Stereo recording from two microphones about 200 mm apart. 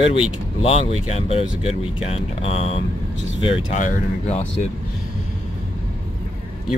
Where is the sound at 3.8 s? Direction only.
35° left (ahead or behind).